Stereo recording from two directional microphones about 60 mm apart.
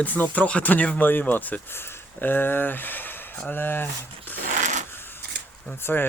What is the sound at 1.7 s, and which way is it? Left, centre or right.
Speech, left.